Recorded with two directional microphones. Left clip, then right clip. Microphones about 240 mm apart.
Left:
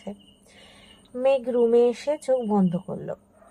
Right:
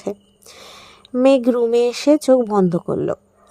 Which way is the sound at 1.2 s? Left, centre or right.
Right.